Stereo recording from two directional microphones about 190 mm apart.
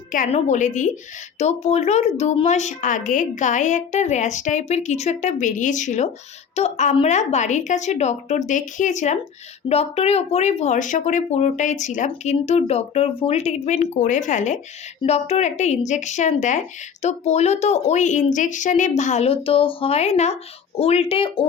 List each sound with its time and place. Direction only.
0.1 s speech: 40° left (ahead or behind)